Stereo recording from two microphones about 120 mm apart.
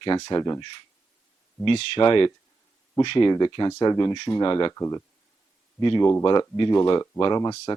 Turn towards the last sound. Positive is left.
turn(degrees=40)  # may be behind; listen again after turning